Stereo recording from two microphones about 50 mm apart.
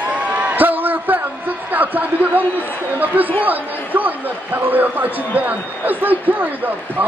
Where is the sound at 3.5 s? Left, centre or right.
Right.